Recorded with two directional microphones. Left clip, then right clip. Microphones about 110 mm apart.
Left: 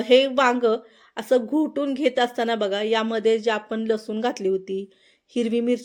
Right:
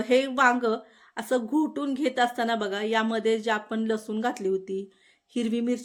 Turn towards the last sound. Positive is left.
turn(degrees=10)  # may be behind; listen again after turning